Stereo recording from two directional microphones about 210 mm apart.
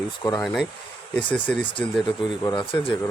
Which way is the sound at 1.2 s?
5° left (ahead or behind).